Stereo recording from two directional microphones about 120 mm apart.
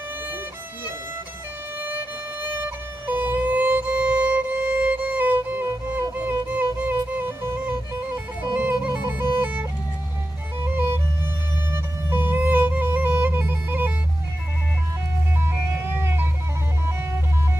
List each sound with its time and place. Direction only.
2.5 s violin: 15° right (ahead or behind)
8.4 s music: 15° right (ahead or behind)
16.0 s music: 20° right (ahead or behind)